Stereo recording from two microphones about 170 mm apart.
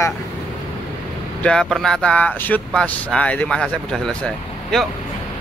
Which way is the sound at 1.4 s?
5° left (ahead or behind).